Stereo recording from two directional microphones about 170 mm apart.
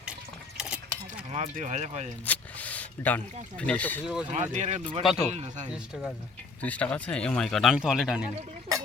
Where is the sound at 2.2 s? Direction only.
10° left (ahead or behind).